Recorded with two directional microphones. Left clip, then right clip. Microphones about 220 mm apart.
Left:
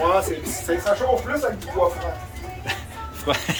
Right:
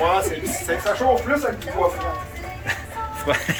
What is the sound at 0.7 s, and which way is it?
Speech, 25° left (ahead or behind).